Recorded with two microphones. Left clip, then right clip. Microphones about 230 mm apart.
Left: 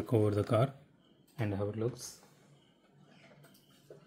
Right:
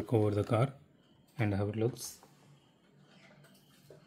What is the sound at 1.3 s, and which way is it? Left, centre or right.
Speech, right.